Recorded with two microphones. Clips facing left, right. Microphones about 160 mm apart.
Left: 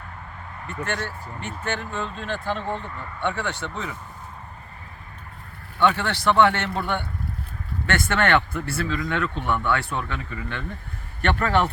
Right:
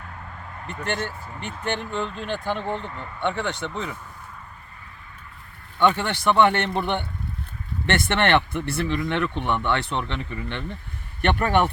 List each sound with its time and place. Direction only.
0.9 s speech: 15° right (ahead or behind)
5.8 s speech: 15° right (ahead or behind)